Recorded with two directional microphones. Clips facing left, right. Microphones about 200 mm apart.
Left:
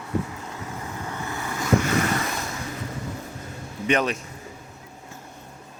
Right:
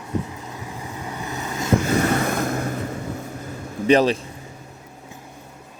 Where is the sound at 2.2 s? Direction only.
55° right (ahead or behind).